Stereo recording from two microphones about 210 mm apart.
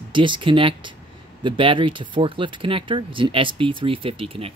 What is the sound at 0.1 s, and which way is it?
Speech, 25° right (ahead or behind).